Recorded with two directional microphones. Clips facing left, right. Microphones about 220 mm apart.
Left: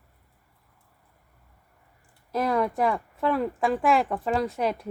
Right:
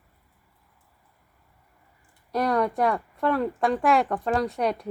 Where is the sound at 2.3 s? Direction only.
Centre (ahead or behind).